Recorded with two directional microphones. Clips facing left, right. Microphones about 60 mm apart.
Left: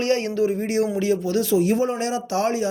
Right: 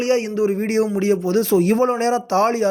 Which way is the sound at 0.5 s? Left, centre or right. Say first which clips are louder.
Right 3 dB; right.